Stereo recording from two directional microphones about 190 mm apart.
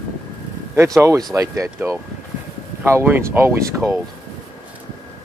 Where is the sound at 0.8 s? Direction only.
15° right (ahead or behind).